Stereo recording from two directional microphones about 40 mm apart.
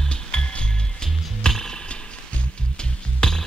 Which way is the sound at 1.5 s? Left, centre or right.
Centre.